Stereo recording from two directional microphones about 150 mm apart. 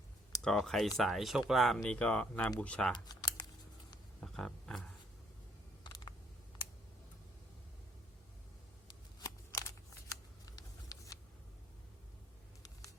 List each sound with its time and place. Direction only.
0.4 s speech: 5° left (ahead or behind)
2.9 s speech: 30° left (ahead or behind)
4.2 s roaring cats: 5° left (ahead or behind)
5.8 s computer keyboard: 30° left (ahead or behind)
8.9 s shuffling cards: 25° left (ahead or behind)